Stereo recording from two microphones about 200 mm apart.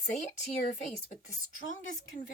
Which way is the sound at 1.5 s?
40° left (ahead or behind).